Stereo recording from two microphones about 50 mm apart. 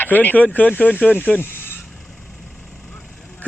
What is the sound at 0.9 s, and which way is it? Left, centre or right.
Speech, right.